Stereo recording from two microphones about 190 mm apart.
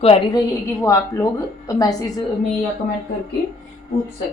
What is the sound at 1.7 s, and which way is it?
Speech, 20° left (ahead or behind).